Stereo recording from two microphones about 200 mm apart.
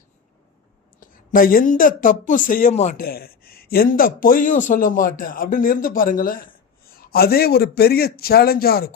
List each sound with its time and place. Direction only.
0.9 s speech: 45° left (ahead or behind)
3.1 s speech: 50° left (ahead or behind)